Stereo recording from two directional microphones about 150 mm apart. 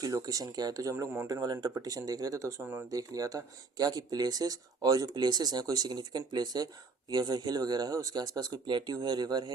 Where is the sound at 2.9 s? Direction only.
25° right (ahead or behind).